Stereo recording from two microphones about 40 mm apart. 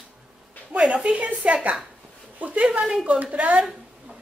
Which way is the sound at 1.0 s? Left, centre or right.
Right.